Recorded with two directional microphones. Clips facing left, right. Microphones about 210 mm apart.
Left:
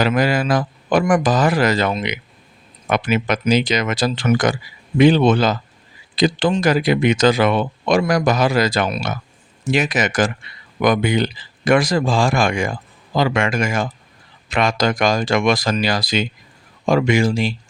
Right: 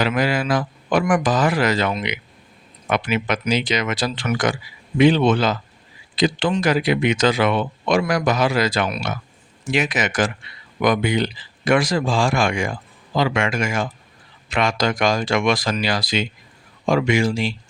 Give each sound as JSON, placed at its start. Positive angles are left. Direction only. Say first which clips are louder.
{"t": 0.0, "sound": "speech", "louder": "left 3 dB", "side_deg": 40}